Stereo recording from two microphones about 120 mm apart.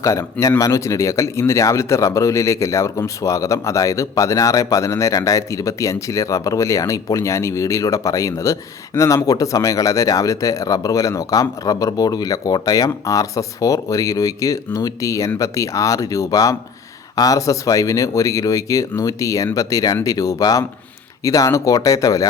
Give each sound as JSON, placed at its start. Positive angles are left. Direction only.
{"t": 0.0, "sound": "speech", "side_deg": 25}